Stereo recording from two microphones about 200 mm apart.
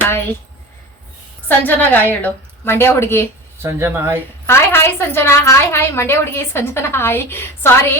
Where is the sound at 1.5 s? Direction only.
10° left (ahead or behind).